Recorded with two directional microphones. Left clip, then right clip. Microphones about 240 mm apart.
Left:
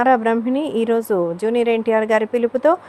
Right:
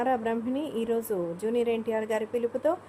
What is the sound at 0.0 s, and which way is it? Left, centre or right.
A woman's voice, centre.